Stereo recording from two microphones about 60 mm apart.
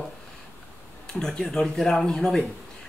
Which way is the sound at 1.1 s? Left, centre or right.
Centre.